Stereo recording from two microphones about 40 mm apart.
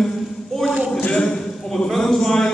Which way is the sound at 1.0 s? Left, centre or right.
Left.